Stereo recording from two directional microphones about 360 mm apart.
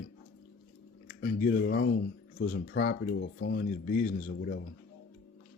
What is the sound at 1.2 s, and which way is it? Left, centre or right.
Speech, left.